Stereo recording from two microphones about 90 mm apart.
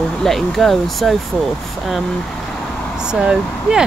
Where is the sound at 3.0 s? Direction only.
10° right (ahead or behind).